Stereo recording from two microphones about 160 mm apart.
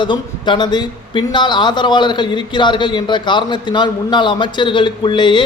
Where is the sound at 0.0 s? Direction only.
30° left (ahead or behind).